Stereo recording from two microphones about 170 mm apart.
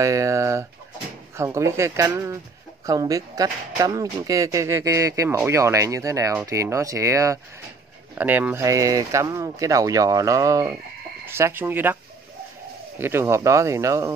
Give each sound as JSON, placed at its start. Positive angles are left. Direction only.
{"t": 0.0, "sound": "a sound", "side_deg": -20}
{"t": 1.3, "sound": "speech", "side_deg": -15}
{"t": 13.0, "sound": "speech", "side_deg": -15}